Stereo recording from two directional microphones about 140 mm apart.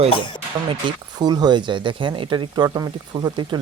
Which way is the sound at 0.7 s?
30° right (ahead or behind).